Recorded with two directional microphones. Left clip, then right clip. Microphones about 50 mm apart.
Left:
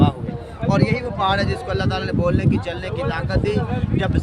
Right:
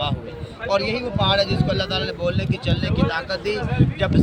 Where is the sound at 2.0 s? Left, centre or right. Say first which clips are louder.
Left 2 dB; left.